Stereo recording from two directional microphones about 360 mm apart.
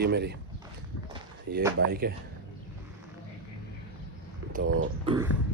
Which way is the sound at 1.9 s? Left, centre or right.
Right.